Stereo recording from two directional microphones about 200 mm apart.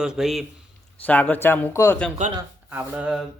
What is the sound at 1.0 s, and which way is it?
Speech, 10° left (ahead or behind).